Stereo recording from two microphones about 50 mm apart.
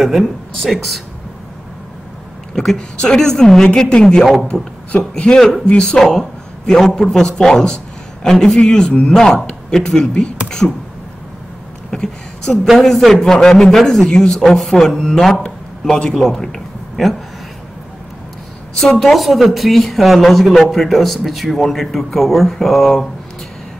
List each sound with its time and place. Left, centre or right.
0.0 s speech: centre
2.5 s a man's voice: centre
4.2 s speech: centre
4.9 s a man's voice: centre
10.6 s a sound: centre
11.9 s a man's voice: centre
18.8 s speech: centre